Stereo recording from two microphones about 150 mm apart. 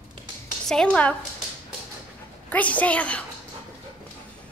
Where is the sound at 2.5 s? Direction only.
10° left (ahead or behind).